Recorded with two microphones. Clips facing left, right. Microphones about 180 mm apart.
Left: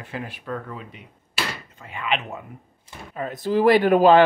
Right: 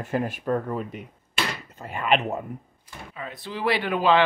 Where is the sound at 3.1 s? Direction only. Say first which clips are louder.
Left 12 dB; 45° left (ahead or behind).